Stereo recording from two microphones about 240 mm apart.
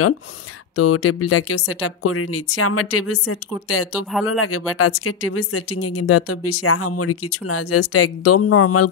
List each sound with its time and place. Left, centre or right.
0.7 s speech: left